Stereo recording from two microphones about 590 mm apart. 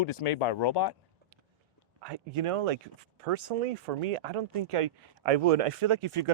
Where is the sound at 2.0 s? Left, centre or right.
Right.